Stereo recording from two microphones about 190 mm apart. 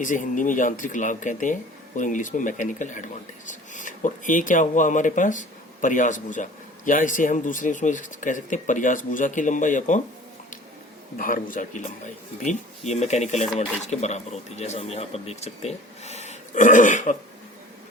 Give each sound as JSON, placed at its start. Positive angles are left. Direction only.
{"t": 0.0, "sound": "speech", "side_deg": 40}
{"t": 11.2, "sound": "speech", "side_deg": 45}